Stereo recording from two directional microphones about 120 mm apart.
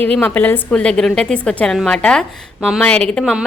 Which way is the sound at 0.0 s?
15° left (ahead or behind).